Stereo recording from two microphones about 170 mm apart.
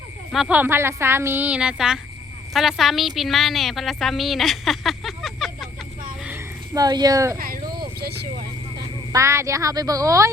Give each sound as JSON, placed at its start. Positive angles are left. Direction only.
{"t": 0.3, "sound": "a woman's voice", "side_deg": -5}
{"t": 6.7, "sound": "speech", "side_deg": -25}
{"t": 7.3, "sound": "a sound", "side_deg": -60}
{"t": 9.1, "sound": "speech", "side_deg": -15}